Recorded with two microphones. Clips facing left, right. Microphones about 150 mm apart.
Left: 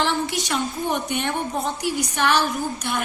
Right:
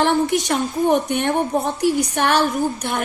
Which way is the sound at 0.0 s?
55° right (ahead or behind).